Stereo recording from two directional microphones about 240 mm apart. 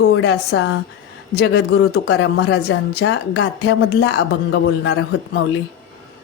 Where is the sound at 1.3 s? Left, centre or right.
Left.